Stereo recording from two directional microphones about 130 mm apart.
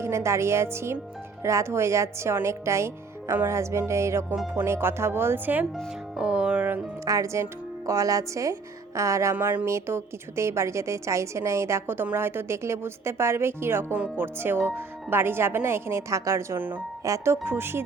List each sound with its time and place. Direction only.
0.0 s a woman's voice: 20° right (ahead or behind)
5.7 s music: 5° right (ahead or behind)
7.0 s a woman's voice: 25° right (ahead or behind)